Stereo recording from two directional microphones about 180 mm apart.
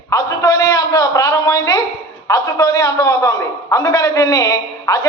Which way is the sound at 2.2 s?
20° left (ahead or behind).